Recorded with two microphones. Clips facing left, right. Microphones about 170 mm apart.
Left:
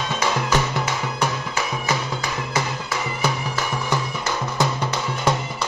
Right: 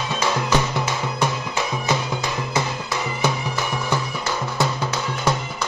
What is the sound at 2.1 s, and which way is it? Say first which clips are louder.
Music: right 1 dB; 15° right (ahead or behind).